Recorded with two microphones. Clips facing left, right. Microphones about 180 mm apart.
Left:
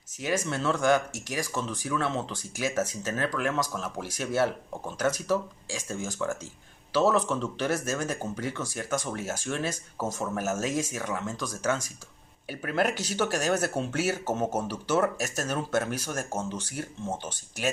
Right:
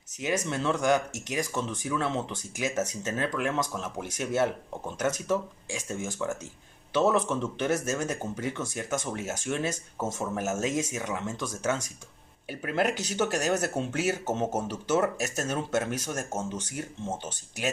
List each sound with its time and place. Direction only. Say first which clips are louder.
0.2 s speech: even; 20° right (ahead or behind)